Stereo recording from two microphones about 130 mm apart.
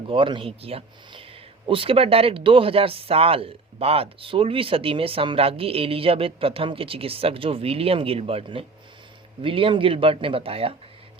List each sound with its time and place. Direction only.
0.1 s speech: 40° right (ahead or behind)